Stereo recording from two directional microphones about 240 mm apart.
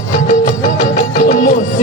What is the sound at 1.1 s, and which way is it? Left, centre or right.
Music, left.